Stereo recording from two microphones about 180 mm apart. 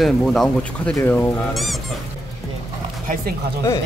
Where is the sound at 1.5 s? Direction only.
Centre (ahead or behind).